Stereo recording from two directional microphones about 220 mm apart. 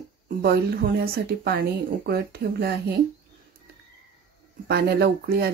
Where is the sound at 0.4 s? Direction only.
45° right (ahead or behind).